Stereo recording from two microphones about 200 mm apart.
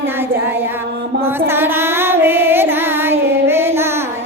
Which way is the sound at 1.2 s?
10° right (ahead or behind).